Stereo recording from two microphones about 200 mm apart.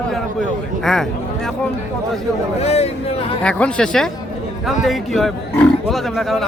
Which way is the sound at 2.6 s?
30° left (ahead or behind).